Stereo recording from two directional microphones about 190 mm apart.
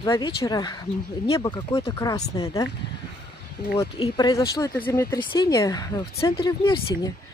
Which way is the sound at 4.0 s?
20° left (ahead or behind).